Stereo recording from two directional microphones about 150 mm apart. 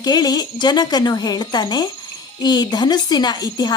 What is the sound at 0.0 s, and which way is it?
A woman's voice, 25° left (ahead or behind).